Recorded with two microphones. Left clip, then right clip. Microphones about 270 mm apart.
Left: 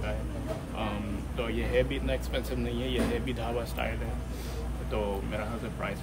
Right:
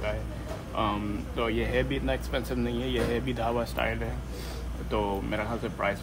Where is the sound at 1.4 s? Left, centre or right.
Centre.